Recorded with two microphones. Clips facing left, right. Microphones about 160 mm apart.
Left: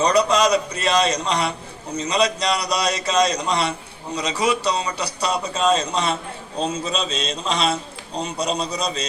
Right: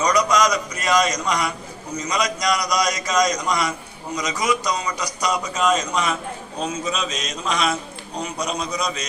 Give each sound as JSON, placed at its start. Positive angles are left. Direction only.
{"t": 0.0, "sound": "a man's voice", "side_deg": 30}